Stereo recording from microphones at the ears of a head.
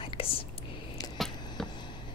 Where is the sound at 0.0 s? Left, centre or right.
Left.